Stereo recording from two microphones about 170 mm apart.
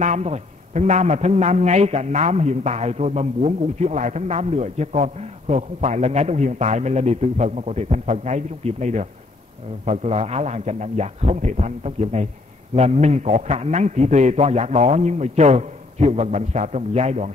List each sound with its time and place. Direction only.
0.0 s a man's voice: 40° right (ahead or behind)